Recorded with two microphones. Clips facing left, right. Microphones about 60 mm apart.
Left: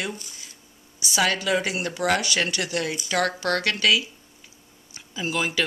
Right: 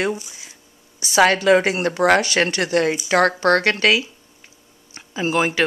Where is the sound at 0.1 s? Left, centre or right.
Centre.